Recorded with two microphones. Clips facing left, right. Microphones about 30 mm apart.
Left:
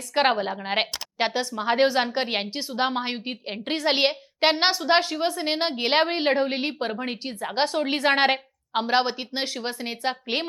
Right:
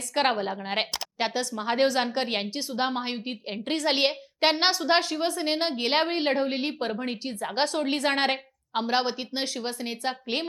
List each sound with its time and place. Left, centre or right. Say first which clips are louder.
0.1 s a woman's voice: left 3 dB; centre